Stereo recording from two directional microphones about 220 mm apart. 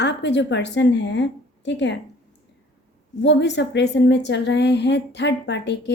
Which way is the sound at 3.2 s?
55° left (ahead or behind).